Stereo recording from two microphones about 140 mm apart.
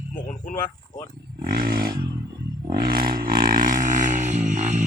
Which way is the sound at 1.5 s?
90° right.